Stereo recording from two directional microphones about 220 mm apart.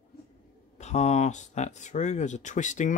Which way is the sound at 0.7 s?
30° left (ahead or behind).